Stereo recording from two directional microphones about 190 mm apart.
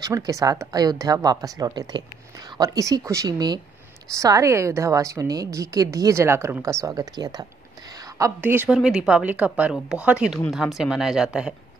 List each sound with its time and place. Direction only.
0.0 s a woman's voice: 15° right (ahead or behind)